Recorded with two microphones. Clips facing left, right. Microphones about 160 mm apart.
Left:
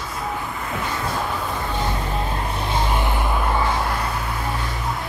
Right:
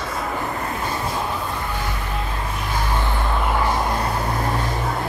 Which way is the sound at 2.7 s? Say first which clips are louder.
Left 1 dB; 20° left (ahead or behind).